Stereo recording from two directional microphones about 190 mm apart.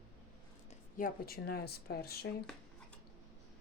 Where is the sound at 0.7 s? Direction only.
45° left (ahead or behind).